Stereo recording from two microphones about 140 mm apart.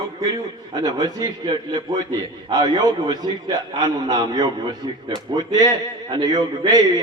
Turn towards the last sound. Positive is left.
turn(degrees=-30)  # may be behind; listen again after turning